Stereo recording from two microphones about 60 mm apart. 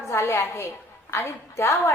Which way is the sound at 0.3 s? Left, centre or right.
Left.